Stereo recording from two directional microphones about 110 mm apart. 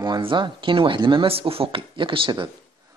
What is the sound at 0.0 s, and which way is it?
Speech, 45° right (ahead or behind).